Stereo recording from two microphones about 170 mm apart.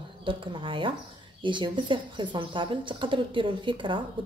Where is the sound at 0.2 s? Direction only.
30° right (ahead or behind).